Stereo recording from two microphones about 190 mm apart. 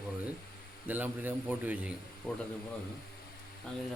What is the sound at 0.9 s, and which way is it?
Speech, 10° right (ahead or behind).